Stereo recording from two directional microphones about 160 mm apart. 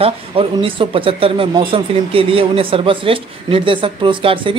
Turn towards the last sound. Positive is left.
turn(degrees=-35)  # may be behind; listen again after turning